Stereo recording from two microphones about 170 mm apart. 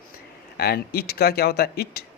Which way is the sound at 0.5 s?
65° left (ahead or behind).